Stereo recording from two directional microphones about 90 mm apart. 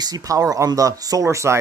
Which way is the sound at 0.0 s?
45° right (ahead or behind).